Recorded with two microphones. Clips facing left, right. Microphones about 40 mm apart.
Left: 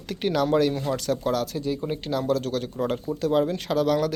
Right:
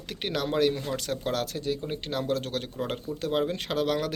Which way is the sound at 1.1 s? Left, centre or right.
Right.